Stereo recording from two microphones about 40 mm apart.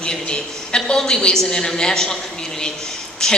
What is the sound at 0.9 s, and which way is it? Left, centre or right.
A woman's voice, centre.